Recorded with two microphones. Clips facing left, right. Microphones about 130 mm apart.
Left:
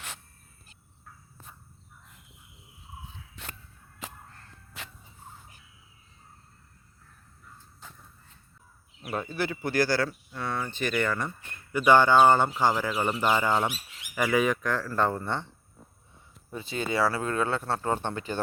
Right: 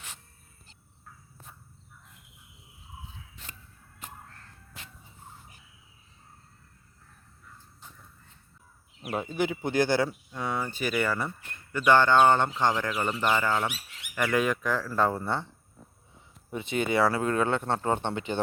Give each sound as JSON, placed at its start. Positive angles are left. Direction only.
{"t": 3.4, "sound": "a sound", "side_deg": 75}
{"t": 4.0, "sound": "whip", "side_deg": 90}
{"t": 4.8, "sound": "a sound", "side_deg": 70}
{"t": 7.8, "sound": "horse", "side_deg": 90}
{"t": 9.0, "sound": "speech", "side_deg": -15}
{"t": 11.7, "sound": "speech", "side_deg": 10}
{"t": 16.5, "sound": "speech", "side_deg": -20}